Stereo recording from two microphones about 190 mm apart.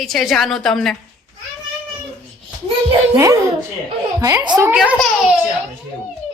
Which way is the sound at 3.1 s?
15° right (ahead or behind).